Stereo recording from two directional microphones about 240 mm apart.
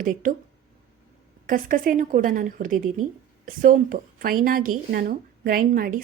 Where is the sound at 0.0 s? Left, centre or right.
Right.